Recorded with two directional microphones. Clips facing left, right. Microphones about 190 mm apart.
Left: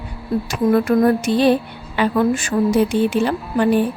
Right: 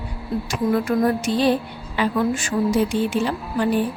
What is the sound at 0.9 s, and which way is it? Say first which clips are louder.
Speech: left 4 dB; 60° left (ahead or behind).